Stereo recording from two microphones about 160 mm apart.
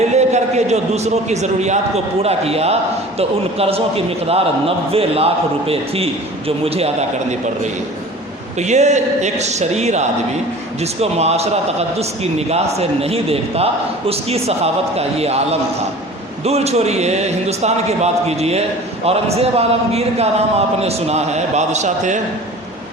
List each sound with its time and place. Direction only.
0.2 s a man's voice: 45° right (ahead or behind)
8.5 s a man's voice: 45° right (ahead or behind)
16.4 s a man's voice: 40° right (ahead or behind)